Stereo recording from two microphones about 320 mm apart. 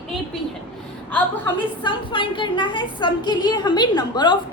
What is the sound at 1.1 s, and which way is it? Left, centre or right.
A woman's voice, centre.